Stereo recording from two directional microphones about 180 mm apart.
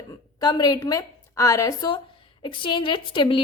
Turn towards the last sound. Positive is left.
turn(degrees=25)  # may be behind; listen again after turning